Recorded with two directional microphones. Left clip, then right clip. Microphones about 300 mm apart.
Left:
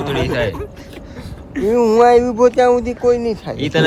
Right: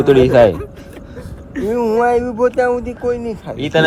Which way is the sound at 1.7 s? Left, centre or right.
Left.